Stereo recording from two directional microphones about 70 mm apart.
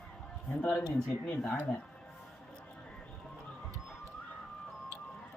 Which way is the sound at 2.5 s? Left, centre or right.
Centre.